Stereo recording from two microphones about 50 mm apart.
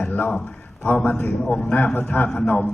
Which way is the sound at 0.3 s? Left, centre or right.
Centre.